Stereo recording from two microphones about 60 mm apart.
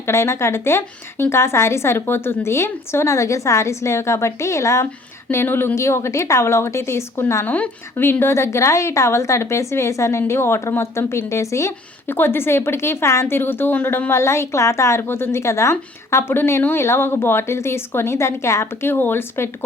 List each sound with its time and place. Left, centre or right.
0.0 s a woman's voice: left
5.3 s a woman's voice: left
5.7 s a woman's voice: left
7.4 s speech: left
8.2 s a woman's voice: left
12.0 s a woman's voice: left
15.0 s a woman's voice: left